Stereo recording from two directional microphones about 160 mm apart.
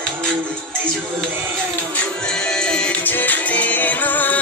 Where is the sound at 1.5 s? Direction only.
5° left (ahead or behind).